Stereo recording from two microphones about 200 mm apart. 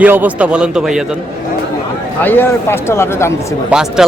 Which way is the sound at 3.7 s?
5° right (ahead or behind).